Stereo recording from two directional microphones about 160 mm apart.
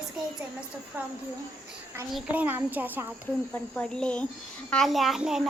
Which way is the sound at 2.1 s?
10° right (ahead or behind).